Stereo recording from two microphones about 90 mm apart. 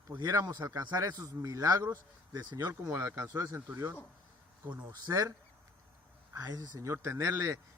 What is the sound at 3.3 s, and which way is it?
Speech, 40° right (ahead or behind).